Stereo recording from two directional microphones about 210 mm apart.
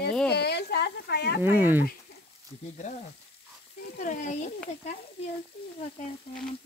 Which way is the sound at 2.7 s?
35° left (ahead or behind).